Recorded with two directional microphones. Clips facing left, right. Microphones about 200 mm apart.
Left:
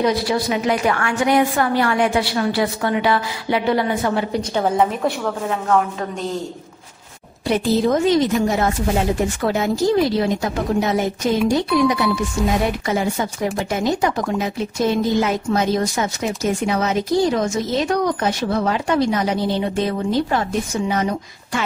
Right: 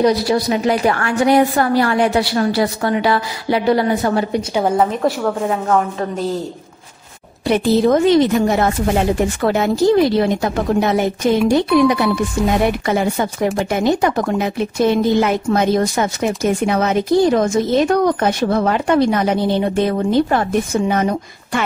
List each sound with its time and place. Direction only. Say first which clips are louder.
0.0 s a woman's voice: right 4 dB; 40° right (ahead or behind)
4.4 s a woman's voice: even; 10° right (ahead or behind)
7.4 s speech: right 4 dB; 65° right (ahead or behind)